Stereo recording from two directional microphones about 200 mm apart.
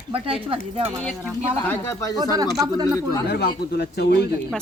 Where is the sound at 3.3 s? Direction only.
55° left (ahead or behind).